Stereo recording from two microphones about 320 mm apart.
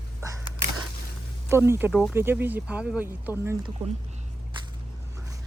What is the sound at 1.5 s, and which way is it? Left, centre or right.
Speech, centre.